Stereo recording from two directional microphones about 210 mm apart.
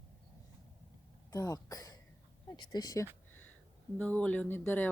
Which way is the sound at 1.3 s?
15° left (ahead or behind).